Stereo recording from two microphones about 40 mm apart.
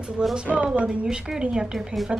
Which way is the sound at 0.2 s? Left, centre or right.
Centre.